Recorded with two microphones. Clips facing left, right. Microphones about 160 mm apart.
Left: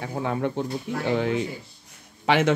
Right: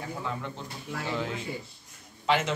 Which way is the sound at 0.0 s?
65° left (ahead or behind).